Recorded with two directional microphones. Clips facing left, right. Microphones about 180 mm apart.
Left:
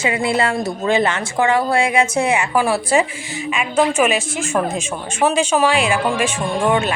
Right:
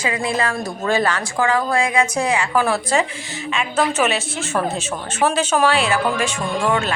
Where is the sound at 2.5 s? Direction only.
10° left (ahead or behind).